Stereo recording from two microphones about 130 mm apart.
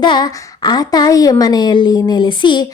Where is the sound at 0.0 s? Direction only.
35° left (ahead or behind).